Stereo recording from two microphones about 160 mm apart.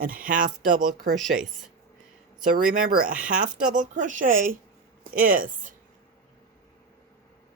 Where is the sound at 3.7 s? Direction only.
55° right (ahead or behind).